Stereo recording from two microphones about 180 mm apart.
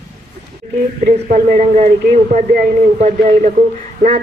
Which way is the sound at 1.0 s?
55° right (ahead or behind).